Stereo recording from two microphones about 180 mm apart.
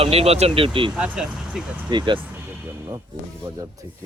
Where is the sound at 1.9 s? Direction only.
25° right (ahead or behind).